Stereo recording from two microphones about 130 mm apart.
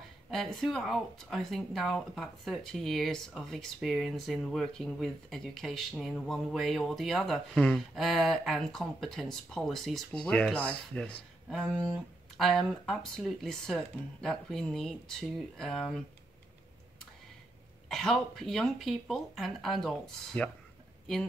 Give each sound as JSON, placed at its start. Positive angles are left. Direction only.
{"t": 0.3, "sound": "speech", "side_deg": 0}
{"t": 17.8, "sound": "speech", "side_deg": 5}